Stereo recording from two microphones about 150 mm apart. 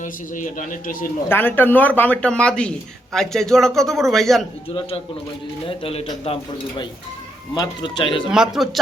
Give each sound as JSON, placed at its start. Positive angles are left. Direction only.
{"t": 0.0, "sound": "a man's voice", "side_deg": 60}
{"t": 1.3, "sound": "speech", "side_deg": 15}
{"t": 5.6, "sound": "speech", "side_deg": 40}
{"t": 7.5, "sound": "speech", "side_deg": 30}
{"t": 8.3, "sound": "speech", "side_deg": -5}